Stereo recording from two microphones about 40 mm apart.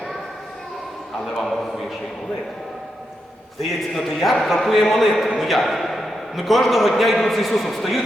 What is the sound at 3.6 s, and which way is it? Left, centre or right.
A man's voice, centre.